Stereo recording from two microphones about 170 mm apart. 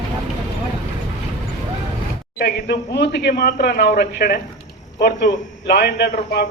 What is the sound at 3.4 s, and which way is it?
A man's voice, 65° left (ahead or behind).